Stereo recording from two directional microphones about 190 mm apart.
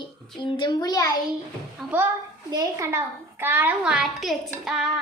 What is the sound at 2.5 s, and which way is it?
A child's voice, 20° right (ahead or behind).